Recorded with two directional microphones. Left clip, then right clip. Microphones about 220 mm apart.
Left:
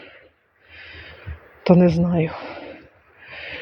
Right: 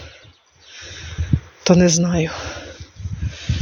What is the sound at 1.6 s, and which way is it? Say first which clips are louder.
Speech: right 1 dB; 5° right (ahead or behind).